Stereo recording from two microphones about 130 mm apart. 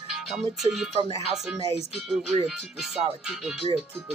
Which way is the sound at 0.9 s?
55° right (ahead or behind).